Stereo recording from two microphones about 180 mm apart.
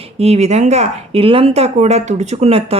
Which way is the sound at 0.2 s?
35° right (ahead or behind).